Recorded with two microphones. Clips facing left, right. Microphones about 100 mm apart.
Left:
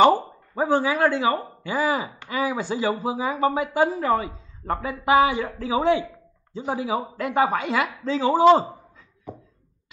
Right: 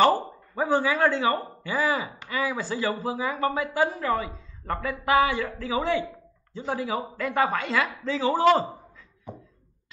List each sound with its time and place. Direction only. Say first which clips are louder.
0.0 s speech: left 4 dB; 15° left (ahead or behind)